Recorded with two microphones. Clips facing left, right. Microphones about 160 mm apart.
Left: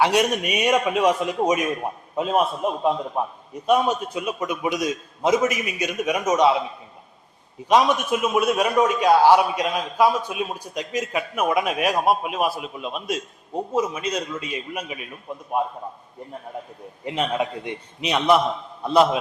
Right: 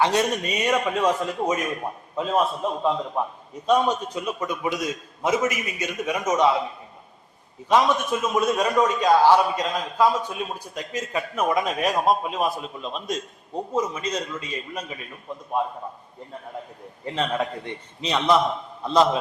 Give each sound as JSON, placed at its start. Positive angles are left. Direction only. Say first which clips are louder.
{"t": 0.0, "sound": "a man's voice", "louder": "left 2 dB", "side_deg": 15}
{"t": 7.7, "sound": "a man's voice", "louder": "left 2 dB", "side_deg": 15}
{"t": 17.1, "sound": "a man's voice", "louder": "left 1 dB", "side_deg": 15}